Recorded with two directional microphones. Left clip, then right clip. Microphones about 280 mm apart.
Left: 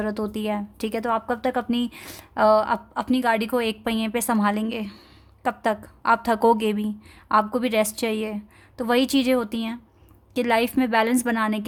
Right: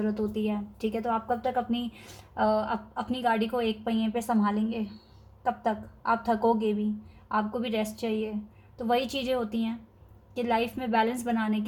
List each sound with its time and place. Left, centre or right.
0.0 s speech: left
4.3 s a woman's voice: left
4.5 s speech: left